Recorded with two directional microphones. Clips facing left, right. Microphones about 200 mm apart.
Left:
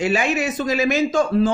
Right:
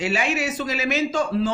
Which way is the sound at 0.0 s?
50° left (ahead or behind).